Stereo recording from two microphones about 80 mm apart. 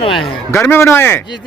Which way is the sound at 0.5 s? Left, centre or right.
Left.